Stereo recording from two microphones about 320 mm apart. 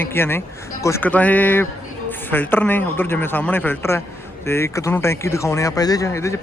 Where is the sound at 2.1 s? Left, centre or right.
Centre.